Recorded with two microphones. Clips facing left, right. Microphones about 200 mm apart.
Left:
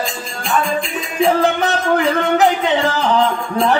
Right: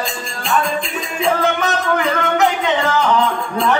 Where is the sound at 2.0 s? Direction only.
35° left (ahead or behind).